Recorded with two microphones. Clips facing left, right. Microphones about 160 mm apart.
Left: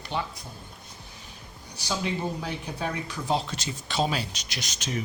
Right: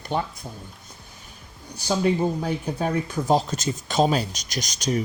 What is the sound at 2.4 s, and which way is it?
Speech, 45° right (ahead or behind).